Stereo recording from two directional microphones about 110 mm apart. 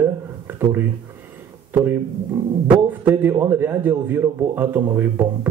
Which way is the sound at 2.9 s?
15° right (ahead or behind).